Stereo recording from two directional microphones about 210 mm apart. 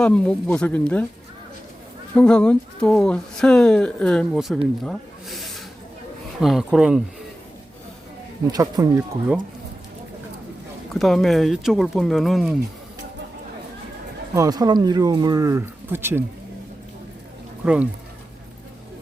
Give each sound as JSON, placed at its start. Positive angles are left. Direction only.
{"t": 0.0, "sound": "speech", "side_deg": 5}
{"t": 2.1, "sound": "speech", "side_deg": 5}
{"t": 4.9, "sound": "snake", "side_deg": 0}
{"t": 6.4, "sound": "speech", "side_deg": 0}
{"t": 8.5, "sound": "speech", "side_deg": -15}
{"t": 10.9, "sound": "speech", "side_deg": 0}
{"t": 14.3, "sound": "speech", "side_deg": -15}
{"t": 17.6, "sound": "speech", "side_deg": -5}